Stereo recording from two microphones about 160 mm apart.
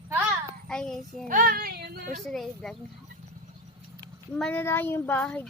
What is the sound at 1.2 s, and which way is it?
Speech, 60° right (ahead or behind).